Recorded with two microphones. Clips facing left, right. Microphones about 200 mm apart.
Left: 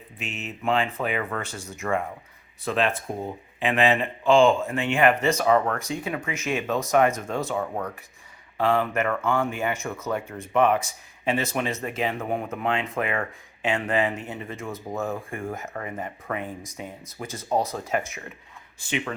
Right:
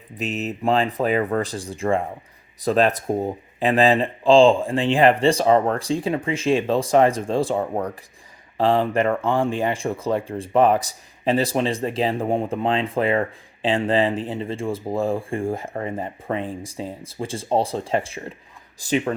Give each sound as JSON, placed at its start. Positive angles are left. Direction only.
{"t": 0.2, "sound": "speech", "side_deg": -40}